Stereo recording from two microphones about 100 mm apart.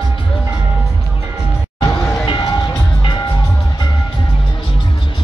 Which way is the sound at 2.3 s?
45° left (ahead or behind).